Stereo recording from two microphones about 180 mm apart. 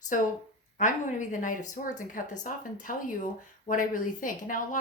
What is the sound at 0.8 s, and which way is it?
A woman's voice, 45° left (ahead or behind).